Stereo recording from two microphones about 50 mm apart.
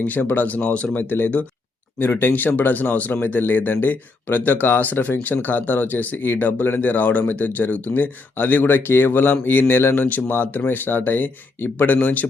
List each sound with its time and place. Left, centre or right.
0.0 s speech: left
0.9 s speech: left